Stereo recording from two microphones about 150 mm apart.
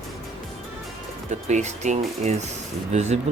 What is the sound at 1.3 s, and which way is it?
Speech, 50° right (ahead or behind).